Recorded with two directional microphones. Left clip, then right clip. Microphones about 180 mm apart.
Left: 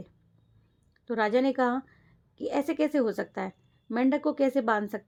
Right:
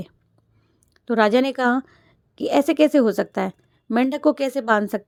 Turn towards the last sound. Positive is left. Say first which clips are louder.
# right 6 dB
turn(degrees=-30)  # may be behind; listen again after turning